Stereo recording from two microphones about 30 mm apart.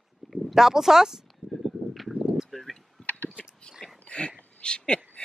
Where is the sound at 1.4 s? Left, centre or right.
Right.